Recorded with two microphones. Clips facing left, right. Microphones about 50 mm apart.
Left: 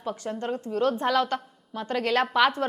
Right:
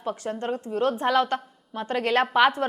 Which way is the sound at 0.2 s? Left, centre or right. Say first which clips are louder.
Right 1 dB; right.